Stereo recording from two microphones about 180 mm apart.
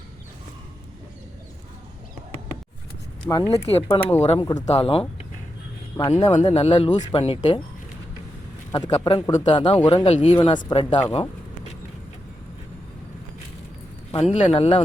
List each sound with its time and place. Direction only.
3.3 s speech: 10° left (ahead or behind)
3.7 s speech: 35° left (ahead or behind)
4.4 s speech: 20° left (ahead or behind)
4.6 s speech: 35° left (ahead or behind)
6.0 s speech: 20° left (ahead or behind)
6.2 s speech: 35° left (ahead or behind)
8.7 s speech: 25° left (ahead or behind)
14.1 s speech: 30° left (ahead or behind)